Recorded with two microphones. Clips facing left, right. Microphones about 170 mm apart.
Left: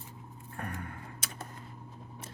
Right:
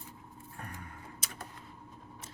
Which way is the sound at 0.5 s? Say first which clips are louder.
Left 7 dB; 65° left (ahead or behind).